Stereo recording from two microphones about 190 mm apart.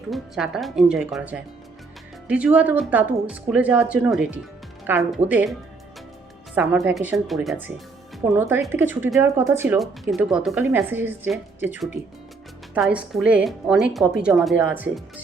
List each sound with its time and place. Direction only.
0.1 s speech: 5° right (ahead or behind)
9.7 s speech: centre (ahead or behind)